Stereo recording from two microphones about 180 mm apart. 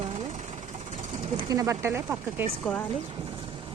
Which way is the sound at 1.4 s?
20° right (ahead or behind).